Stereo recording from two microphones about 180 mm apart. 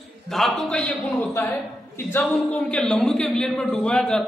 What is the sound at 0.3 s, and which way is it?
A man's voice, centre (ahead or behind).